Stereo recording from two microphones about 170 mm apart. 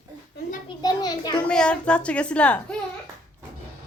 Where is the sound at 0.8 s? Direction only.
25° left (ahead or behind).